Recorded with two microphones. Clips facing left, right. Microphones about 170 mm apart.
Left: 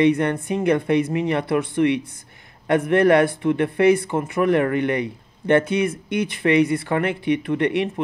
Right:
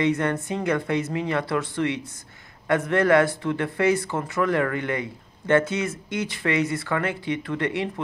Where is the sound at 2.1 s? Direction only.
25° left (ahead or behind).